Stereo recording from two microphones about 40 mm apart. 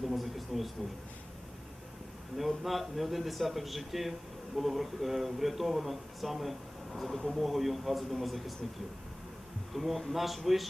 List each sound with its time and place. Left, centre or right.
0.0 s a sound: centre
2.4 s speech: centre
9.7 s speech: centre